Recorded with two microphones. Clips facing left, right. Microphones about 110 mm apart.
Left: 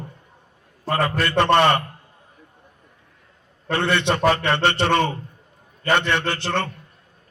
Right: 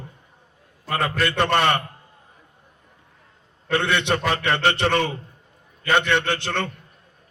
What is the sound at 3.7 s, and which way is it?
A man's voice, 45° left (ahead or behind).